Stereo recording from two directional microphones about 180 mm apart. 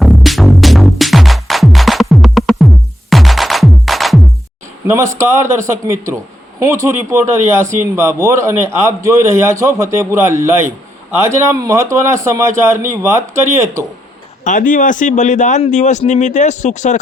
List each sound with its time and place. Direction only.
0.0 s music: centre (ahead or behind)
5.1 s speech: 15° right (ahead or behind)
14.4 s speech: 45° left (ahead or behind)